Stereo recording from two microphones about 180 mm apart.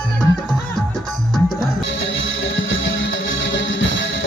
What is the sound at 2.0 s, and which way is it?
Music, 90° left.